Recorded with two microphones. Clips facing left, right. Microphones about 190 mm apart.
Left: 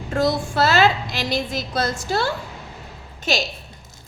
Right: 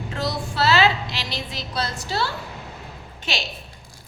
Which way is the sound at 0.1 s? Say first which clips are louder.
Left 8 dB; 50° left (ahead or behind).